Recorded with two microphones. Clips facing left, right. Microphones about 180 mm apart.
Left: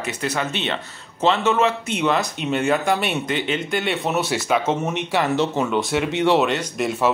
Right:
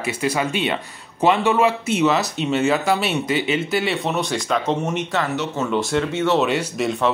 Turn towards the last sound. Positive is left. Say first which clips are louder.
# right 1 dB
turn(degrees=-5)  # may be behind; listen again after turning